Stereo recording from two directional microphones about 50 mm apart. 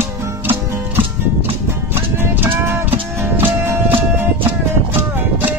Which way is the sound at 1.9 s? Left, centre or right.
Right.